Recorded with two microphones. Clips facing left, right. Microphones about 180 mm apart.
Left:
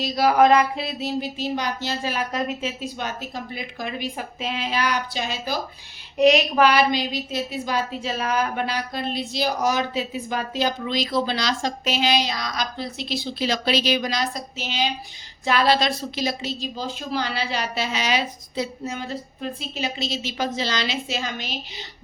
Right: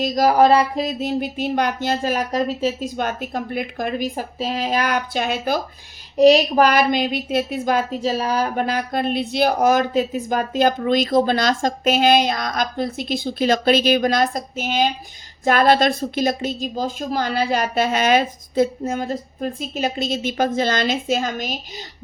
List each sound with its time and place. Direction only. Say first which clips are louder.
0.0 s a woman's voice: right 3 dB; 45° right (ahead or behind)
6.1 s a woman's voice: right 4 dB; 35° right (ahead or behind)